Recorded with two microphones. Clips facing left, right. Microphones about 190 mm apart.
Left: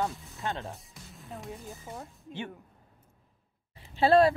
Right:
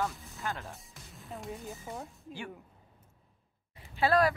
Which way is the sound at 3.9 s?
30° left (ahead or behind).